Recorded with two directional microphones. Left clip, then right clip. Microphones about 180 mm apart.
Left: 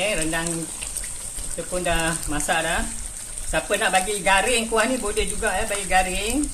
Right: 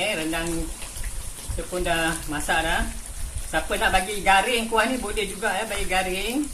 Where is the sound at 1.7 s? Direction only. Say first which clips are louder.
Even; 20° left (ahead or behind).